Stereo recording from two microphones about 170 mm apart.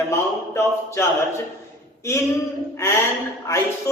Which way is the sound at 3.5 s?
15° left (ahead or behind).